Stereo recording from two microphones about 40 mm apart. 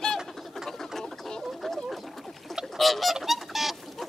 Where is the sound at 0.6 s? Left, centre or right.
Centre.